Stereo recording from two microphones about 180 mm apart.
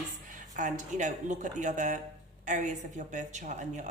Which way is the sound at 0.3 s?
45° right (ahead or behind).